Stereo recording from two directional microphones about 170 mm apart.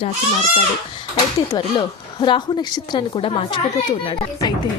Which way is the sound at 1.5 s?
30° left (ahead or behind).